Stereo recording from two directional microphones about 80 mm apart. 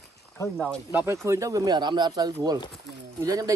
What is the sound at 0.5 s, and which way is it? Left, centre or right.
Speech, centre.